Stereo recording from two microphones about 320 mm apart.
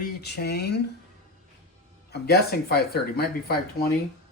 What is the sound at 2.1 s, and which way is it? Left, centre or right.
Speech, left.